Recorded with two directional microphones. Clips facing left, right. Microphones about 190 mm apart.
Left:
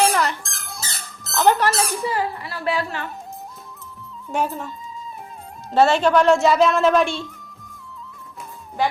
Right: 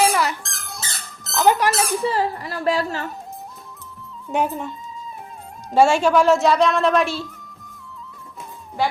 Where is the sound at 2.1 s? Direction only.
40° right (ahead or behind).